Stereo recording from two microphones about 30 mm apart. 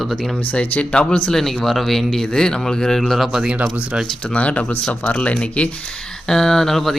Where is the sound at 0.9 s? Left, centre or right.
Left.